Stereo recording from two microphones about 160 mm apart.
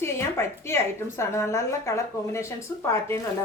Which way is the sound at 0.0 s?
15° left (ahead or behind).